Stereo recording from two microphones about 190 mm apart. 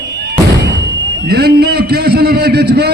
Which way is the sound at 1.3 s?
60° right (ahead or behind).